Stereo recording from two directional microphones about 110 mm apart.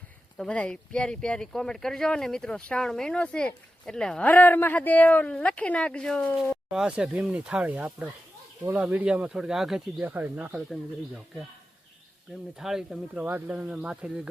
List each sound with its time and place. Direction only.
0.3 s speech: 10° left (ahead or behind)
6.7 s speech: 10° right (ahead or behind)
10.0 s speech: 15° right (ahead or behind)
12.5 s speech: 5° right (ahead or behind)
13.2 s speech: 15° right (ahead or behind)